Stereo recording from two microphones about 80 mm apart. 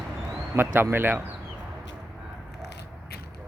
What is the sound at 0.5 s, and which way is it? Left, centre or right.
Speech, right.